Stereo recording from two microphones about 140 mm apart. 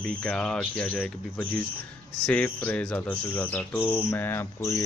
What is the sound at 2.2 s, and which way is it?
Speech, 10° left (ahead or behind).